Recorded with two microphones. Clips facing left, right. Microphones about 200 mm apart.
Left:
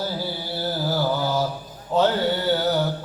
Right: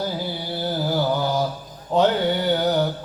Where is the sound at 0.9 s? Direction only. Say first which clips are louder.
Right 1 dB; 20° right (ahead or behind).